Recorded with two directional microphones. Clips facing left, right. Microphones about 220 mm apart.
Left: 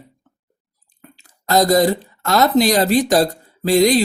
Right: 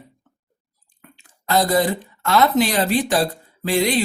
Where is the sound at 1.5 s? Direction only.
40° left (ahead or behind).